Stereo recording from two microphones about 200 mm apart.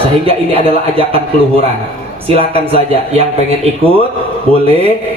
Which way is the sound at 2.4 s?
30° right (ahead or behind).